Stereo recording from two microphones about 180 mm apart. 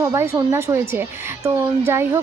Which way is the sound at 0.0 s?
15° right (ahead or behind).